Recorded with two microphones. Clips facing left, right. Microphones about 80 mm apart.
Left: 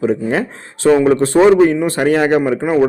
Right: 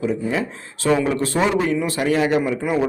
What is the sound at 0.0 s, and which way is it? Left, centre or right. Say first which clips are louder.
Speech: left 6 dB; left.